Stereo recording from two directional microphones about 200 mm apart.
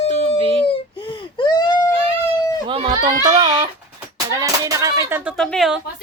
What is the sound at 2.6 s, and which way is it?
A child's voice, 25° right (ahead or behind).